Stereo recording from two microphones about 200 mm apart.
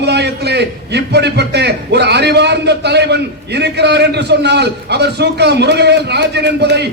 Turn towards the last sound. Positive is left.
turn(degrees=-55)  # may be behind; listen again after turning